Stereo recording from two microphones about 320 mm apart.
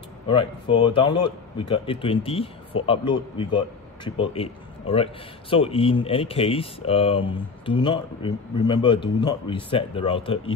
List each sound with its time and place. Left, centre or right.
0.3 s a man's voice: centre